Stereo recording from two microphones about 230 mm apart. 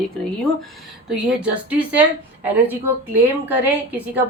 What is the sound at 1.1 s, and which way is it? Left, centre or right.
Speech, centre.